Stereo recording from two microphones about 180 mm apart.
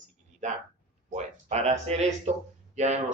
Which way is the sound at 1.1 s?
40° right (ahead or behind).